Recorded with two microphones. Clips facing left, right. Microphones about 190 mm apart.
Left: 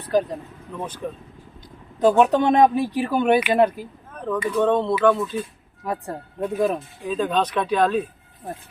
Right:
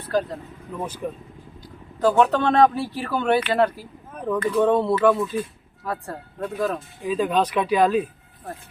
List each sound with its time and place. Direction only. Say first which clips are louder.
0.0 s speech: left 3 dB; 15° left (ahead or behind)
0.7 s speech: right 1 dB; 10° right (ahead or behind)
2.0 s speech: left 2 dB; 20° left (ahead or behind)
4.1 s a sound: right 1 dB; 10° right (ahead or behind)
4.5 s speech: right 1 dB; 10° right (ahead or behind)
5.8 s speech: left 2 dB; 15° left (ahead or behind)
7.1 s speech: right 1 dB; 5° right (ahead or behind)